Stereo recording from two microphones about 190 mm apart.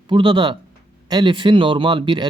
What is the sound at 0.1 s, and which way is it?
Speech, 25° right (ahead or behind).